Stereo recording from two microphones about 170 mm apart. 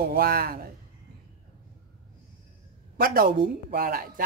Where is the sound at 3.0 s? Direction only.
60° right (ahead or behind).